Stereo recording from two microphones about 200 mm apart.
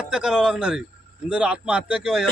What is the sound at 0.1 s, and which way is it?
Speech, 5° right (ahead or behind).